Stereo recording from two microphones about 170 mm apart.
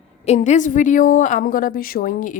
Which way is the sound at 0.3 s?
45° left (ahead or behind).